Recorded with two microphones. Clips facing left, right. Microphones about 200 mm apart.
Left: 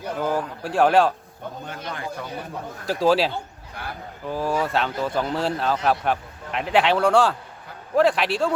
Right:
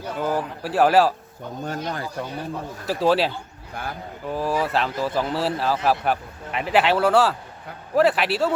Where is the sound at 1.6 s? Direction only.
40° right (ahead or behind).